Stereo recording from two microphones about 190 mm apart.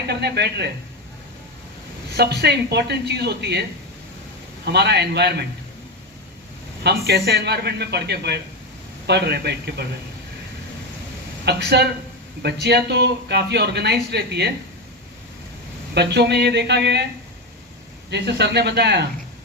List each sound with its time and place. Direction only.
0.1 s speech: 60° right (ahead or behind)
2.1 s speech: 60° right (ahead or behind)
6.8 s speech: 55° right (ahead or behind)
11.4 s speech: 60° right (ahead or behind)
16.0 s speech: 60° right (ahead or behind)
18.1 s speech: 60° right (ahead or behind)